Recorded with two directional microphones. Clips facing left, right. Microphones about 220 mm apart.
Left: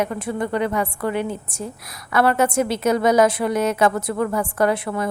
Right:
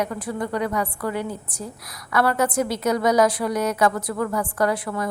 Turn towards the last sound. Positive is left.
turn(degrees=25)  # may be behind; listen again after turning